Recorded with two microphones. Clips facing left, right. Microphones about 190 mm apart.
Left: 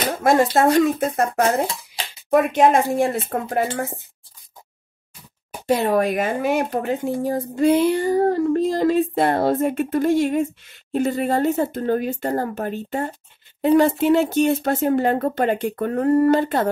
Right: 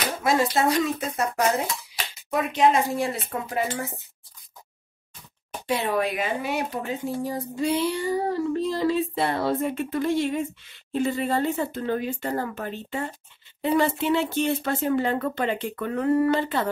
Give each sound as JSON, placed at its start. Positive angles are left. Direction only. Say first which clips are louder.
{"t": 0.2, "sound": "speech", "louder": "left 6 dB", "side_deg": 50}
{"t": 5.7, "sound": "speech", "louder": "left 6 dB", "side_deg": 45}
{"t": 6.8, "sound": "speech", "louder": "left 6 dB", "side_deg": 60}